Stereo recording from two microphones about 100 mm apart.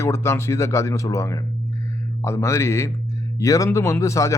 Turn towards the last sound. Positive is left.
turn(degrees=30)  # may be behind; listen again after turning